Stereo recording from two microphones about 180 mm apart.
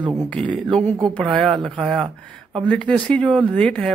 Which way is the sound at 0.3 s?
5° left (ahead or behind).